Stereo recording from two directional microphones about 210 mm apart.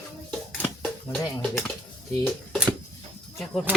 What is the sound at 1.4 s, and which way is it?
Speech, 10° left (ahead or behind).